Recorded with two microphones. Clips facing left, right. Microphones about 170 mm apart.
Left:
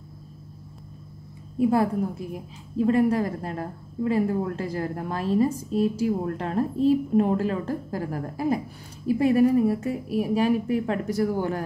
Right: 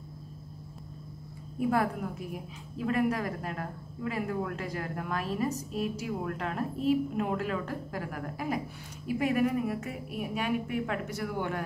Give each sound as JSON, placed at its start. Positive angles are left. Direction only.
{"t": 1.6, "sound": "a woman's voice", "side_deg": 25}